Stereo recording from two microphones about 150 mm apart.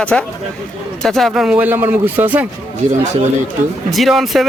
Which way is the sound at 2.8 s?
50° right (ahead or behind).